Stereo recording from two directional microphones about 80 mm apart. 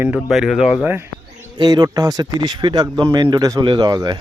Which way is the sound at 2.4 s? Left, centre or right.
Right.